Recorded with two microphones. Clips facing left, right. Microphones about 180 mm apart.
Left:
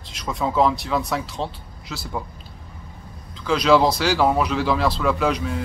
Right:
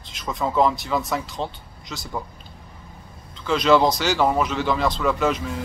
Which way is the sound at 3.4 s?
Centre (ahead or behind).